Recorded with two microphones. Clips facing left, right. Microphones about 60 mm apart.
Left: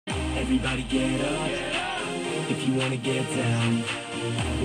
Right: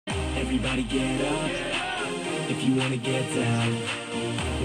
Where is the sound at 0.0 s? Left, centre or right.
Centre.